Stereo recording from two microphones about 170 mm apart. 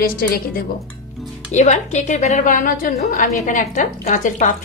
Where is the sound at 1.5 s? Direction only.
45° left (ahead or behind).